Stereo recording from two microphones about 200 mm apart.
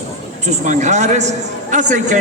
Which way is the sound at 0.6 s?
35° right (ahead or behind).